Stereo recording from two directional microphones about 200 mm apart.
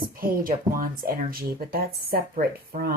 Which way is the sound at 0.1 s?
45° right (ahead or behind).